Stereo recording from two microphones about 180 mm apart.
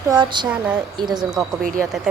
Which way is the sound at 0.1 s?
25° right (ahead or behind).